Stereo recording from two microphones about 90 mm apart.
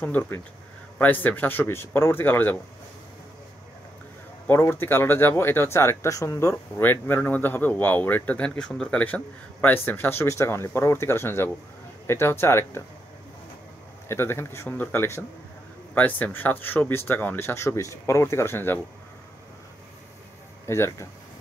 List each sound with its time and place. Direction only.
0.0 s speech: 20° left (ahead or behind)
4.5 s speech: 25° left (ahead or behind)
14.0 s speech: 30° left (ahead or behind)
20.6 s speech: 30° left (ahead or behind)